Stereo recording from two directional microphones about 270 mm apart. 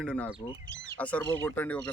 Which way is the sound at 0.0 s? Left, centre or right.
Centre.